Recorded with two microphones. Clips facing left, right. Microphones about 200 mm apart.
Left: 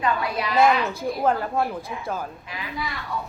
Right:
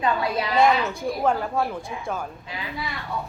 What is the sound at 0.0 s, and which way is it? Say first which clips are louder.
Speech: right 1 dB; 25° right (ahead or behind).